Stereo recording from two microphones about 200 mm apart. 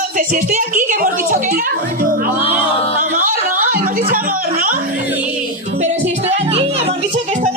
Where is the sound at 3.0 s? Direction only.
40° right (ahead or behind).